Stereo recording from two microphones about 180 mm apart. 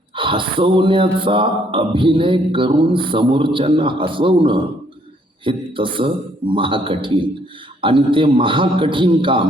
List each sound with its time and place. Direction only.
0.2 s speech: 30° right (ahead or behind)